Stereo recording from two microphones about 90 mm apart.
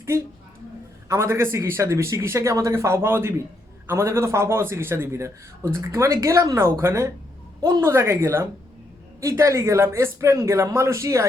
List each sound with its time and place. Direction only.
1.0 s a man's voice: 30° right (ahead or behind)